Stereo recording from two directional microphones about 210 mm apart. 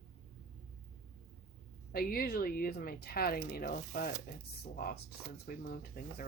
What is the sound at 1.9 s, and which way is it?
Speech, 45° left (ahead or behind).